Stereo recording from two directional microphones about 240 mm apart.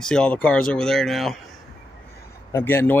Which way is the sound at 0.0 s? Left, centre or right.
Centre.